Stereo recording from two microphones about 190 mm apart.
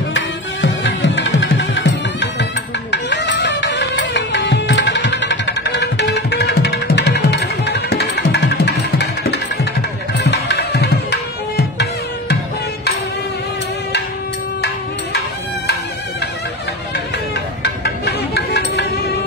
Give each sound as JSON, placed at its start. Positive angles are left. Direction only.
{"t": 0.1, "sound": "music", "side_deg": 70}
{"t": 17.8, "sound": "music", "side_deg": 60}